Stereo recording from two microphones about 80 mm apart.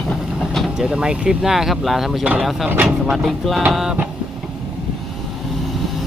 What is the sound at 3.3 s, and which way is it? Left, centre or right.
Speech, centre.